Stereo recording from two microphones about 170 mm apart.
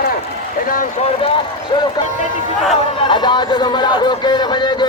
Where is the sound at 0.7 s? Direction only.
50° left (ahead or behind).